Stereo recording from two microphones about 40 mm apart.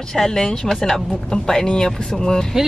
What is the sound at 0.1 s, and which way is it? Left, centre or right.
Speech, centre.